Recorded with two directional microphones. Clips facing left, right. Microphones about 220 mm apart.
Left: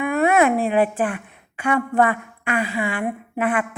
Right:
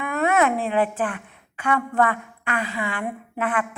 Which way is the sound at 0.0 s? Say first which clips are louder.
Left 4 dB; 10° left (ahead or behind).